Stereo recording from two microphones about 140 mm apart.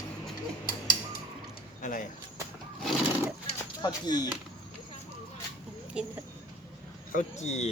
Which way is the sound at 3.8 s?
30° left (ahead or behind).